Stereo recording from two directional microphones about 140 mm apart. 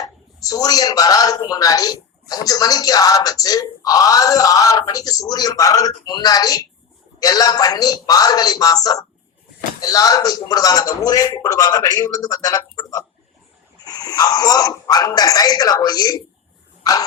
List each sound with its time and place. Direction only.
0.0 s a man's voice: 25° left (ahead or behind)